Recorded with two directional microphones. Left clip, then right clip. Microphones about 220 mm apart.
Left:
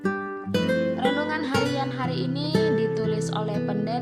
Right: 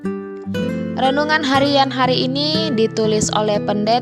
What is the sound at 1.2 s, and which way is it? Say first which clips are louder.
Music: right 10 dB; 40° right (ahead or behind).